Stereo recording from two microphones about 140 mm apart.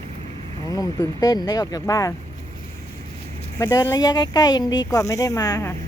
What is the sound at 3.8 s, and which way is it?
Speech, 30° left (ahead or behind).